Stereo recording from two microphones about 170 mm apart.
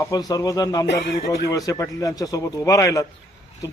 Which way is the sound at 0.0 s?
20° left (ahead or behind).